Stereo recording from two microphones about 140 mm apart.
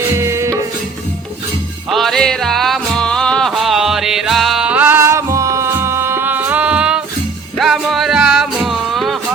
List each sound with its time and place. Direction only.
0.2 s music: 20° right (ahead or behind)
1.9 s music: centre (ahead or behind)